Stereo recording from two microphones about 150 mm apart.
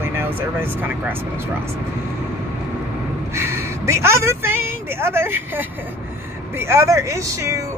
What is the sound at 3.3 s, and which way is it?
A woman's voice, 15° right (ahead or behind).